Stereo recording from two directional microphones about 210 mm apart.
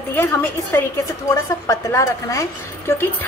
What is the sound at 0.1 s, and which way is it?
A woman's voice, 10° left (ahead or behind).